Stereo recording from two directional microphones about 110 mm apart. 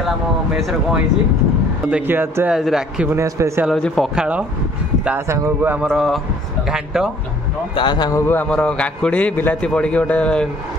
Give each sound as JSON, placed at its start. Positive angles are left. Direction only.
{"t": 1.9, "sound": "speech", "side_deg": -15}
{"t": 2.5, "sound": "speech", "side_deg": -5}
{"t": 3.1, "sound": "a man's voice", "side_deg": -25}
{"t": 3.6, "sound": "speech", "side_deg": 5}
{"t": 4.1, "sound": "speech", "side_deg": -10}
{"t": 7.7, "sound": "a man's voice", "side_deg": 45}
{"t": 8.1, "sound": "a man's voice", "side_deg": 20}